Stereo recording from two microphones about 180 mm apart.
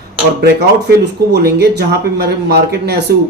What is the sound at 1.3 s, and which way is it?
A man's voice, 65° right (ahead or behind).